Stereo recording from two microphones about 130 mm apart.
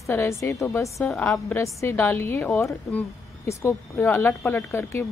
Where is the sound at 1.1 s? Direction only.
10° left (ahead or behind).